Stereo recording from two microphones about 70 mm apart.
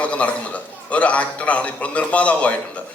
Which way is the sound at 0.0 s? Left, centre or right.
Centre.